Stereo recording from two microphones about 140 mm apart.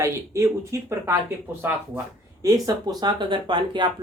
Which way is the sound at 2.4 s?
25° right (ahead or behind).